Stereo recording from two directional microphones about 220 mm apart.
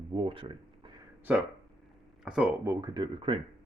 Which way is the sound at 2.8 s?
20° right (ahead or behind).